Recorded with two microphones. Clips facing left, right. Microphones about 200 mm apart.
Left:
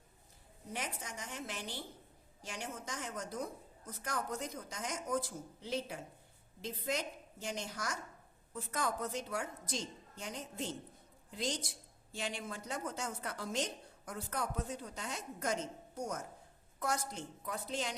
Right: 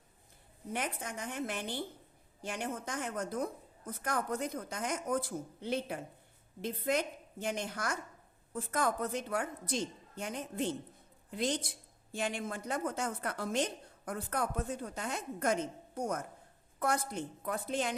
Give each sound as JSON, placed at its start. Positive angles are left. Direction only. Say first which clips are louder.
{"t": 0.7, "sound": "a woman's voice", "louder": "right 5 dB", "side_deg": -55}